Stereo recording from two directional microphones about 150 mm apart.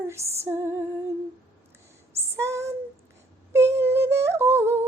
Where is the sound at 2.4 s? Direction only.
20° right (ahead or behind).